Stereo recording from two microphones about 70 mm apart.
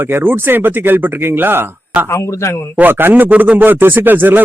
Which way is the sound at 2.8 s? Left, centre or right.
Right.